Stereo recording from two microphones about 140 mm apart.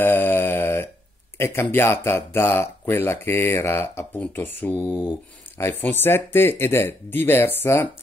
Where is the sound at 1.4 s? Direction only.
15° left (ahead or behind).